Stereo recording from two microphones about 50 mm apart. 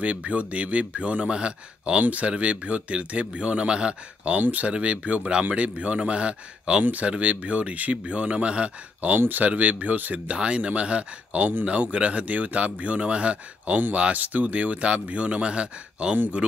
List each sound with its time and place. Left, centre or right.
0.0 s speech: right
6.8 s speech: right